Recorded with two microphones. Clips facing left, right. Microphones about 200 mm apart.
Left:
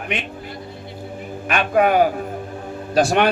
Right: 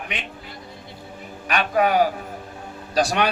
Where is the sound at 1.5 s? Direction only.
50° left (ahead or behind).